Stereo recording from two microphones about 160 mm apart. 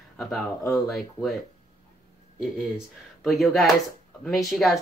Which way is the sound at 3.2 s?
Centre (ahead or behind).